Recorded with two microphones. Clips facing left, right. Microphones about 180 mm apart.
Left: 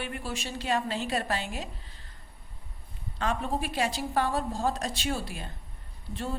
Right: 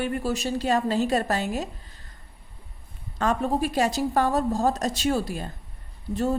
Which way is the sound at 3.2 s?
40° right (ahead or behind).